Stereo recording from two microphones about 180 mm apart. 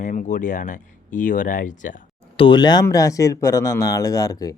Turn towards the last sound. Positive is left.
turn(degrees=20)  # may be behind; listen again after turning